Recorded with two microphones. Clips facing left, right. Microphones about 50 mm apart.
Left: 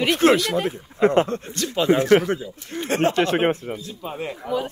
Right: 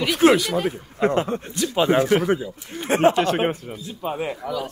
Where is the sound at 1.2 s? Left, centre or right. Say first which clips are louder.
Right 1 dB; centre.